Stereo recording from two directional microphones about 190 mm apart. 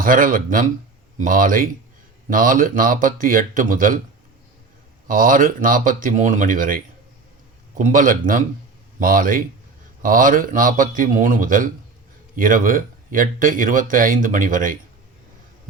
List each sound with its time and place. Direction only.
0.0 s speech: 45° right (ahead or behind)
5.0 s speech: 45° right (ahead or behind)